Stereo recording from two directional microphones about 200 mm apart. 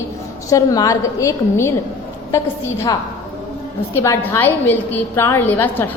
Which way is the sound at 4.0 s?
10° left (ahead or behind).